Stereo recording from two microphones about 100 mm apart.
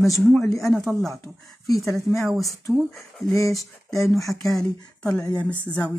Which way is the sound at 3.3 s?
35° left (ahead or behind).